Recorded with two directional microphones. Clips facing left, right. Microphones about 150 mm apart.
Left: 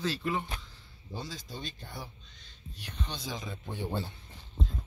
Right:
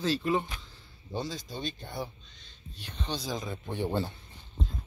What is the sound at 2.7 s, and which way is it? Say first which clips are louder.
Speech: right 4 dB; 30° right (ahead or behind).